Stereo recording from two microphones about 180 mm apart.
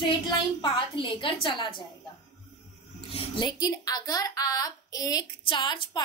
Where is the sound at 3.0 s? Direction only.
30° left (ahead or behind).